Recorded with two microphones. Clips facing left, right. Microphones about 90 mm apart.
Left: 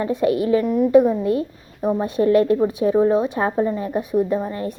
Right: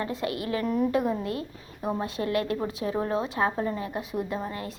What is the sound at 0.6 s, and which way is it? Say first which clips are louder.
Speech: left 7 dB; 5° left (ahead or behind).